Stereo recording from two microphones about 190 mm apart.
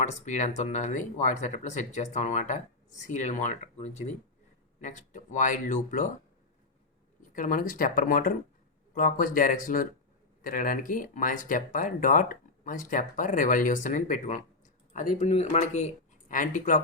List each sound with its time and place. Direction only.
0.0 s speech: 40° left (ahead or behind)
7.2 s speech: 45° left (ahead or behind)